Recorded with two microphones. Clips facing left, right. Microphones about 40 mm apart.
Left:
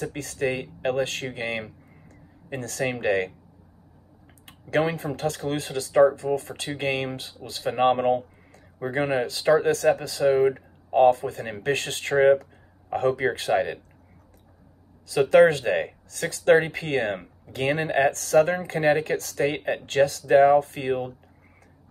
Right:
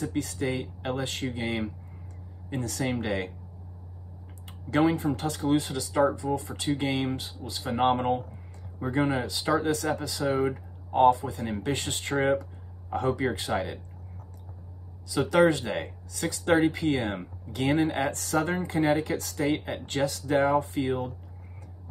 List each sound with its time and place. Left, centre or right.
0.0 s speech: left
2.8 s speech: left
4.5 s speech: left
10.3 s speech: left
10.9 s speech: left
15.1 s speech: left